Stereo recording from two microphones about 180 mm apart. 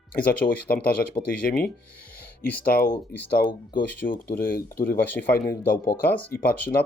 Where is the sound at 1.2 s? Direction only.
20° left (ahead or behind).